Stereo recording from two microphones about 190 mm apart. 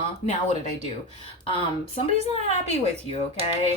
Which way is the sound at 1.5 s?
30° left (ahead or behind).